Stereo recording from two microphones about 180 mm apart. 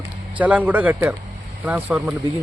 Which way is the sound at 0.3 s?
10° right (ahead or behind).